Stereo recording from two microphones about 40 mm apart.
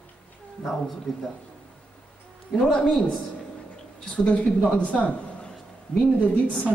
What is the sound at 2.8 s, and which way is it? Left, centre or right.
Speech, centre.